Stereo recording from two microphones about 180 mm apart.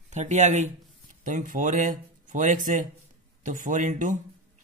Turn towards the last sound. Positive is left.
turn(degrees=-45)  # may be behind; listen again after turning